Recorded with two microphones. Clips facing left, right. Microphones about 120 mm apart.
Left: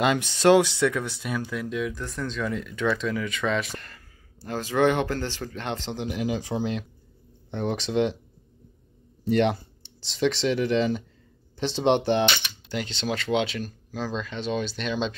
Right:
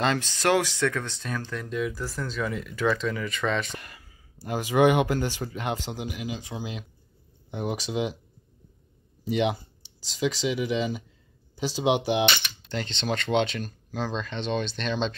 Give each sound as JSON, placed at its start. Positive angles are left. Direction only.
{"t": 0.0, "sound": "speech", "side_deg": 15}
{"t": 3.7, "sound": "speech", "side_deg": -15}
{"t": 6.1, "sound": "speech", "side_deg": 45}
{"t": 6.6, "sound": "speech", "side_deg": -5}
{"t": 9.2, "sound": "speech", "side_deg": -5}
{"t": 12.3, "sound": "speech", "side_deg": 10}